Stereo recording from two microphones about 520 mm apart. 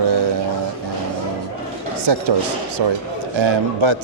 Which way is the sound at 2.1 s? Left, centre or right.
Right.